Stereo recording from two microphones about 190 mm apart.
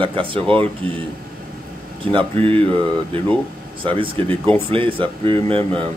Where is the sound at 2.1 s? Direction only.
30° right (ahead or behind).